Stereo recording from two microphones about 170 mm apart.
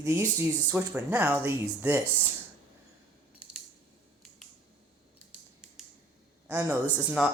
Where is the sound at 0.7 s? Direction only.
10° right (ahead or behind).